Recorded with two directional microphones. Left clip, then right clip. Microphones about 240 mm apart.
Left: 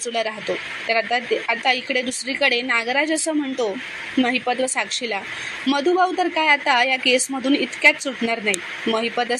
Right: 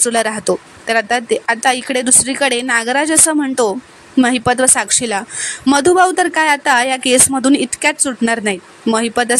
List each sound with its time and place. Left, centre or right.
0.0 s speech: right